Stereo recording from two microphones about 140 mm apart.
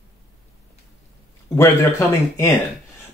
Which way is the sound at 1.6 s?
20° left (ahead or behind).